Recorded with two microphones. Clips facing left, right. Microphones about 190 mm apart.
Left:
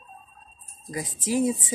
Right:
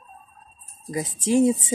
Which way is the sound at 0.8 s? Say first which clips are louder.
Right 5 dB; 20° right (ahead or behind).